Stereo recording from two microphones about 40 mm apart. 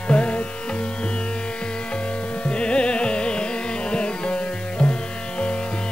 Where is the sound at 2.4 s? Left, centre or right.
Left.